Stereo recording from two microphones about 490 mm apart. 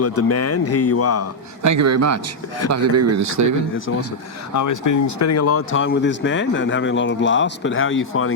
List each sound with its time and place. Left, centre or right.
0.0 s speech: left
1.6 s speech: right
4.5 s speech: left